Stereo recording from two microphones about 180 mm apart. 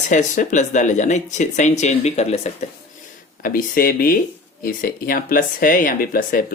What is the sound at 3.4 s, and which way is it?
Speech, 50° left (ahead or behind).